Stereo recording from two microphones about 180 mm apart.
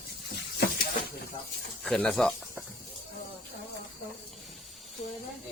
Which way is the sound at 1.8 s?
5° left (ahead or behind).